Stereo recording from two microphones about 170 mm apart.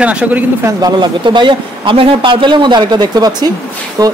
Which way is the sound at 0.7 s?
25° right (ahead or behind).